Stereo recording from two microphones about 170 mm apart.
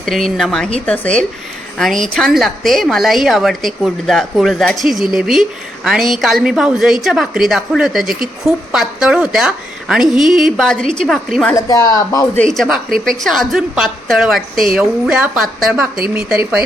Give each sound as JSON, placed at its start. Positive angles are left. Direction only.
{"t": 0.0, "sound": "a woman's voice", "side_deg": 0}
{"t": 11.5, "sound": "speech", "side_deg": 20}
{"t": 12.4, "sound": "a woman's voice", "side_deg": 0}